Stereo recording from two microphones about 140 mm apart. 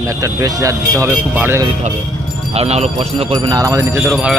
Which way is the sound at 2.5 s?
45° right (ahead or behind).